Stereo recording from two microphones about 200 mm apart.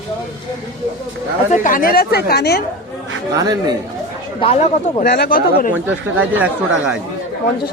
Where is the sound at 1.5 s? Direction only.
40° left (ahead or behind).